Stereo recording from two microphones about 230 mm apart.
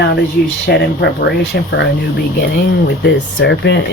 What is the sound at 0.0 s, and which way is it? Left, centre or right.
Speech, left.